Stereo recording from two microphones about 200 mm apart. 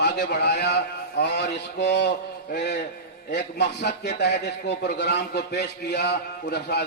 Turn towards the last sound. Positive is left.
turn(degrees=55)  # may be behind; listen again after turning